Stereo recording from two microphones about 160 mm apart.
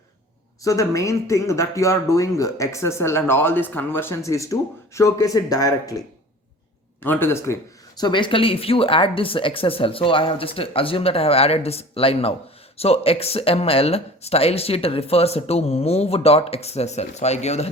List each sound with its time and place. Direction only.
0.6 s speech: 20° left (ahead or behind)
7.0 s speech: 15° left (ahead or behind); by 17.7 s 45° left (ahead or behind)